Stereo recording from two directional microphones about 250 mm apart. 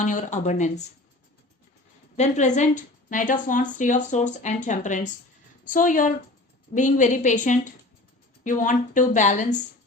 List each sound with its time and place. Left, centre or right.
0.0 s speech: left
2.1 s a woman's voice: left